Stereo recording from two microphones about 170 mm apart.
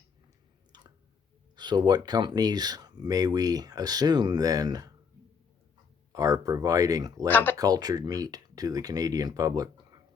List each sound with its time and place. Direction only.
1.5 s speech: 25° right (ahead or behind)
6.1 s speech: 20° right (ahead or behind)
7.3 s speech: 10° left (ahead or behind)
7.6 s speech: 20° right (ahead or behind)